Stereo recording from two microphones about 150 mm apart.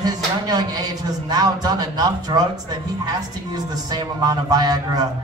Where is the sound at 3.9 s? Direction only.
25° right (ahead or behind).